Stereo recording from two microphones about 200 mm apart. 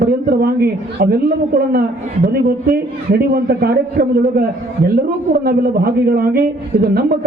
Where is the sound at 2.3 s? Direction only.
50° right (ahead or behind).